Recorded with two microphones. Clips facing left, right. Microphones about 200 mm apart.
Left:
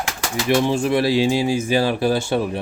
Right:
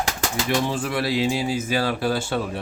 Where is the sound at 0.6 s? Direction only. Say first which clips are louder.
Left 6 dB; 20° left (ahead or behind).